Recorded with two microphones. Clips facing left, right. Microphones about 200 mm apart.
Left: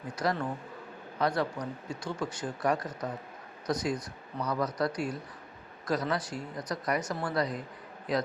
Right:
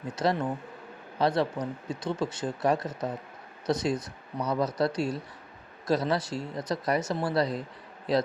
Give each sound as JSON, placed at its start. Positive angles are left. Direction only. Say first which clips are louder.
{"t": 0.2, "sound": "speech", "louder": "right 4 dB", "side_deg": -25}